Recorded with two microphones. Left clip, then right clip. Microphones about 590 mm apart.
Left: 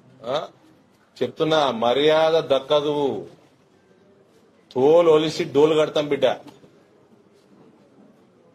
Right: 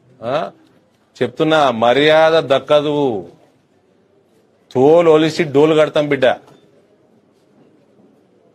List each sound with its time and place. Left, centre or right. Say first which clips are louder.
1.1 s a man's voice: right 6 dB; right
4.6 s a man's voice: right 5 dB; right